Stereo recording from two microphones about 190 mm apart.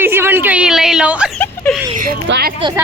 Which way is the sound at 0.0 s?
10° right (ahead or behind).